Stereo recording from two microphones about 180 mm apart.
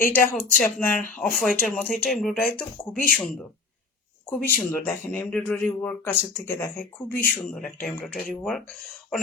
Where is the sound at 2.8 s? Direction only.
20° left (ahead or behind).